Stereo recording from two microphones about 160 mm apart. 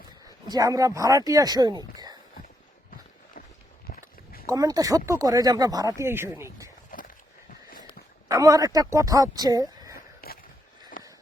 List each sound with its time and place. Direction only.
0.4 s speech: 25° right (ahead or behind)
3.8 s a sound: 70° left (ahead or behind)
4.4 s speech: 20° right (ahead or behind)
8.3 s speech: 20° right (ahead or behind)
10.2 s skateboard: 70° left (ahead or behind)
11.0 s a sound: 60° left (ahead or behind)